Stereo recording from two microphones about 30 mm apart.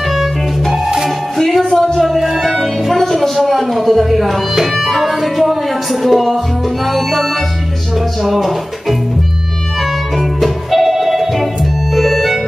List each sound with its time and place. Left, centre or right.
0.1 s music: centre
0.8 s music: centre
1.4 s music: centre
2.0 s music: centre
8.2 s speech: centre
10.1 s music: centre
11.9 s organ: centre